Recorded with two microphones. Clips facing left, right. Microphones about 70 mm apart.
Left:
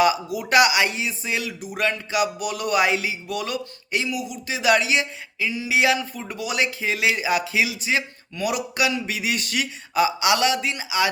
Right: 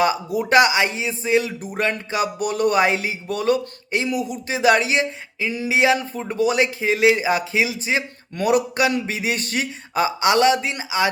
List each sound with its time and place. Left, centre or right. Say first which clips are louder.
0.0 s speech: even; right
8.4 s speech: right 5 dB; right